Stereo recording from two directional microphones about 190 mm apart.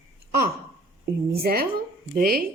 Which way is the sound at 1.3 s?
55° right (ahead or behind).